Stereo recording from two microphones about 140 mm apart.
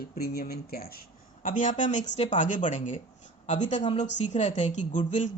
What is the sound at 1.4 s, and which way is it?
A woman's voice, 65° left (ahead or behind).